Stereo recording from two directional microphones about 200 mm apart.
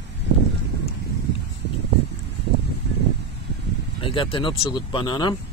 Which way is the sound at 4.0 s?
25° left (ahead or behind).